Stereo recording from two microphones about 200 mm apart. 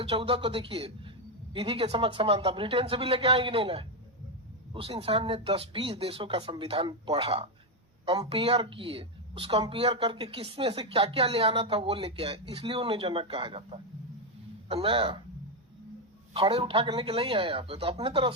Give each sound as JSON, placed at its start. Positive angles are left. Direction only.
{"t": 0.0, "sound": "a woman's voice", "side_deg": -30}
{"t": 16.3, "sound": "a woman's voice", "side_deg": -25}